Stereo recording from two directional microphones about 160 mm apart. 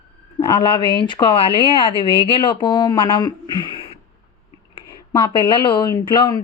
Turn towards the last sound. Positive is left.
turn(degrees=25)  # may be behind; listen again after turning